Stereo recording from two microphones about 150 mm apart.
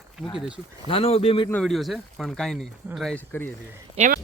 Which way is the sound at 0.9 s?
40° left (ahead or behind).